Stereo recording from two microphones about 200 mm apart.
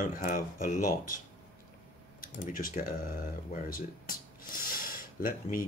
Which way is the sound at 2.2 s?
45° left (ahead or behind).